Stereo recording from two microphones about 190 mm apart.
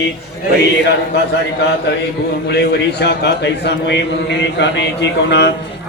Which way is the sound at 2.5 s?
60° left (ahead or behind).